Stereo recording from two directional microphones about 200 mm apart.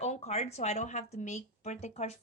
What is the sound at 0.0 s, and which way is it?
Speech, 35° left (ahead or behind).